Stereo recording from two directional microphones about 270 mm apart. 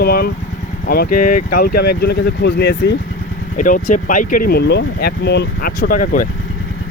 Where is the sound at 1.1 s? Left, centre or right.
Left.